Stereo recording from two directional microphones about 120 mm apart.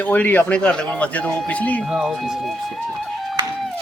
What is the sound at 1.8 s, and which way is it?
Speech, 5° right (ahead or behind).